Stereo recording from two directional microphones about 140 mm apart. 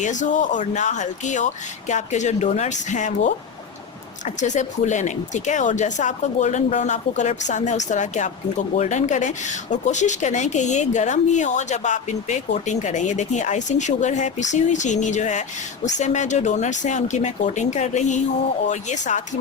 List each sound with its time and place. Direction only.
0.0 s speech: 60° left (ahead or behind)
4.4 s speech: 60° left (ahead or behind)